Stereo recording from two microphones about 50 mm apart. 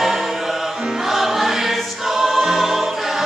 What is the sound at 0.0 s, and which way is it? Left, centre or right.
Music, centre.